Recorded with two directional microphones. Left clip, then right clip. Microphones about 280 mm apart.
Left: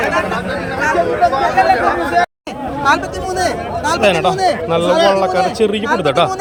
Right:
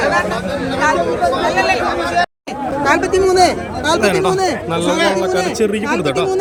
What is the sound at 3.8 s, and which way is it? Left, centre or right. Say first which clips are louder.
A man's voice: left 1 dB; centre.